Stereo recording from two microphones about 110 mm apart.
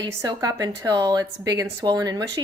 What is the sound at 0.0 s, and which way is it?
A woman's voice, 35° right (ahead or behind).